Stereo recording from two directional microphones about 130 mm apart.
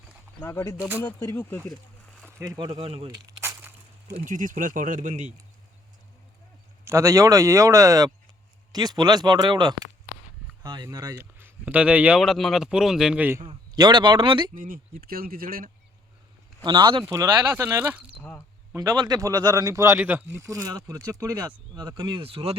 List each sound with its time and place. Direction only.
0.4 s speech: 25° left (ahead or behind)
2.6 s speech: 30° right (ahead or behind)
2.8 s speech: 45° right (ahead or behind)
3.1 s a sound: 25° right (ahead or behind)
4.2 s speech: 90° right; by 5.3 s 70° right (ahead or behind)
6.8 s speech: 20° right (ahead or behind)
11.2 s speech: 15° right (ahead or behind)
13.4 s speech: 35° right (ahead or behind)
14.5 s speech: 90° right
16.6 s speech: 40° right (ahead or behind)
17.5 s speech: 15° right (ahead or behind)
18.2 s speech: 10° left (ahead or behind)
18.8 s speech: 30° right (ahead or behind)
20.0 s speech: 15° right (ahead or behind); by 22.5 s 45° right (ahead or behind)